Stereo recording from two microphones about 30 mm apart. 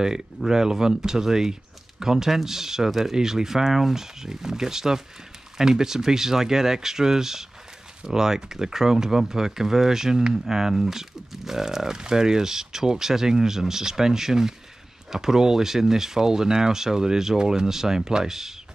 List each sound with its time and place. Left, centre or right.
0.5 s speech: centre
2.9 s speech: centre
3.2 s speech: centre